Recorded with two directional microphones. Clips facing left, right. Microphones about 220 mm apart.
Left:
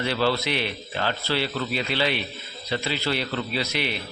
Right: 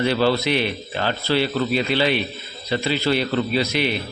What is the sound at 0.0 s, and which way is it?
A man's voice, 15° right (ahead or behind).